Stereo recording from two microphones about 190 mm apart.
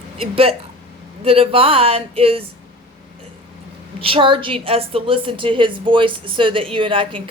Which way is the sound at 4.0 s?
30° right (ahead or behind).